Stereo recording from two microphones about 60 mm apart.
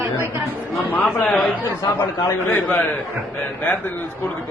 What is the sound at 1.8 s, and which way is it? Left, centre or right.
Speech, left.